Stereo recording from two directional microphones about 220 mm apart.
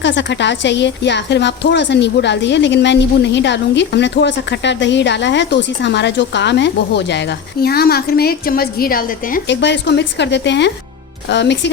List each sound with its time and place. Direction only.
0.0 s a woman's voice: 55° left (ahead or behind)